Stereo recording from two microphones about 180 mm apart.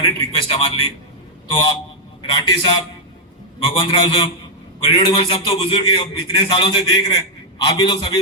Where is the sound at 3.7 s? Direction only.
25° left (ahead or behind).